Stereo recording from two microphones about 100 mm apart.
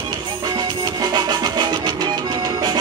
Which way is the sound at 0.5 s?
40° right (ahead or behind).